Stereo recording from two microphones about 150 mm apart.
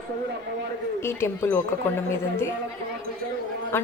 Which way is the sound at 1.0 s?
15° left (ahead or behind).